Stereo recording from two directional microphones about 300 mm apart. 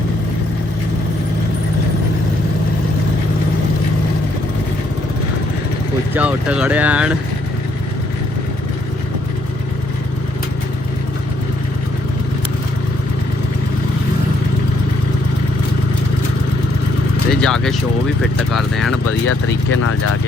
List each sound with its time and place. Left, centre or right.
6.1 s speech: centre
17.4 s speech: centre
19.3 s speech: left